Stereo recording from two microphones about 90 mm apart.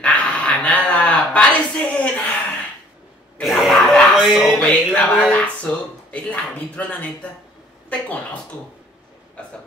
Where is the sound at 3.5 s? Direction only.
Centre (ahead or behind).